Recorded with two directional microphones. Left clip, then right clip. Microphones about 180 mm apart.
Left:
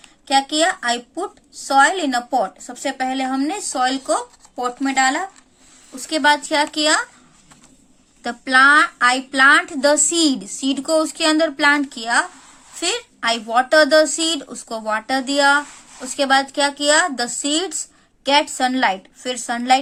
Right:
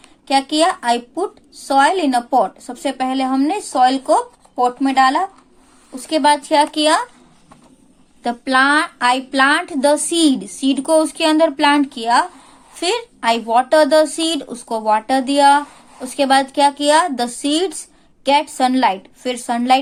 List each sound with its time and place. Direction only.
0.3 s speech: 10° left (ahead or behind)
8.2 s speech: 10° left (ahead or behind)